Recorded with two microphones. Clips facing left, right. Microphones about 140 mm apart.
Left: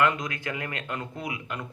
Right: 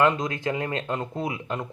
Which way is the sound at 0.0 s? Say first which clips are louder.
Right 4 dB; 25° right (ahead or behind).